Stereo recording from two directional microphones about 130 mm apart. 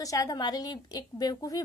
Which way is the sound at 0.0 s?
25° left (ahead or behind).